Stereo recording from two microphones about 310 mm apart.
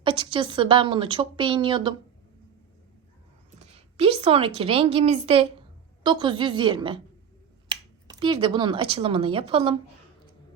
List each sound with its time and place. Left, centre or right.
0.0 s a woman's voice: centre
3.6 s a woman's voice: centre
8.2 s a woman's voice: centre